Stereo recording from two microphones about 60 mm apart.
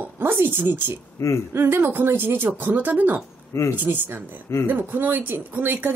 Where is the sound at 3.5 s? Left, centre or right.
Left.